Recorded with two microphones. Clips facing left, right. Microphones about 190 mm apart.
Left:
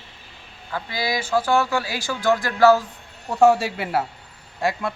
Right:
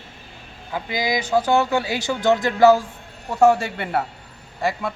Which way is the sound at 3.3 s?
Centre (ahead or behind).